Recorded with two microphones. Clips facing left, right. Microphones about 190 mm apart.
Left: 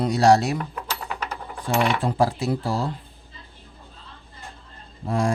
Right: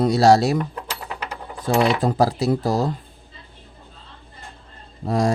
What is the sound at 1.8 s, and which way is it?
Speech, 40° right (ahead or behind).